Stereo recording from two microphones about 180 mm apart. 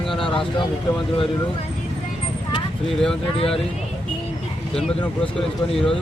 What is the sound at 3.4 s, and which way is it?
Speech, 30° left (ahead or behind).